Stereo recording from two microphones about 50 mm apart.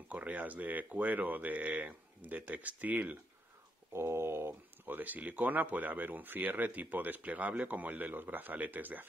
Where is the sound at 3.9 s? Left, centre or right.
Right.